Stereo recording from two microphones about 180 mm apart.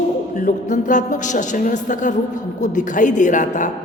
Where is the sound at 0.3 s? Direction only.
45° left (ahead or behind).